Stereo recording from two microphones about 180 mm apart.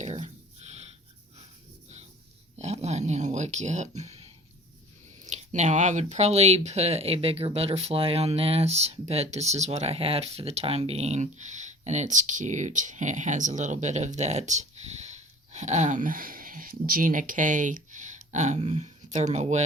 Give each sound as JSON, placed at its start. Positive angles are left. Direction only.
{"t": 0.0, "sound": "a sound", "side_deg": -40}
{"t": 2.6, "sound": "speech", "side_deg": -35}
{"t": 5.3, "sound": "speech", "side_deg": -40}